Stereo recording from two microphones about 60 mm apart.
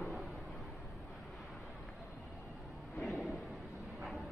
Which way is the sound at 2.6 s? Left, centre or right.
Centre.